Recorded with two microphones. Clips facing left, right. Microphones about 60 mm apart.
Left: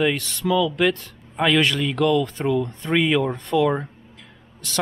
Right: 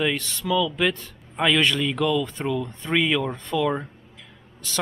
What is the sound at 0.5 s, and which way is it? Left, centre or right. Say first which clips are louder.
Speech: left 3 dB; centre.